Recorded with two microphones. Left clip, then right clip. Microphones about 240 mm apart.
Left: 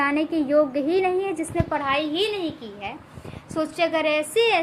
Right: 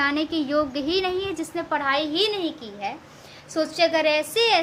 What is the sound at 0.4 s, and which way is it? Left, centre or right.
A woman's voice, right.